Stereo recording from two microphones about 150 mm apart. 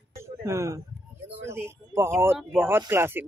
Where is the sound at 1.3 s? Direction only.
15° right (ahead or behind).